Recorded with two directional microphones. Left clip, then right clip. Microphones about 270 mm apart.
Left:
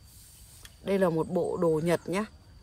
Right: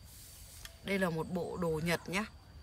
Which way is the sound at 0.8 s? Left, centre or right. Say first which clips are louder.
Left 8 dB; centre.